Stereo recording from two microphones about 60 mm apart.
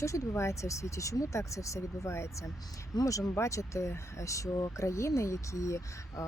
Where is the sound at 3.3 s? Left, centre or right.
Left.